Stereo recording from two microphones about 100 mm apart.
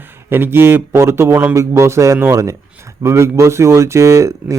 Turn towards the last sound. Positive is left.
turn(degrees=-30)  # may be behind; listen again after turning